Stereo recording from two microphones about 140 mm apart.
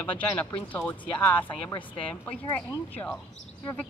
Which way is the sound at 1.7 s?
35° left (ahead or behind).